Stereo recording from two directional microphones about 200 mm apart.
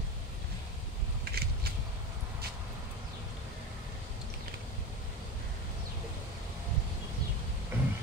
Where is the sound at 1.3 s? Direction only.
50° right (ahead or behind).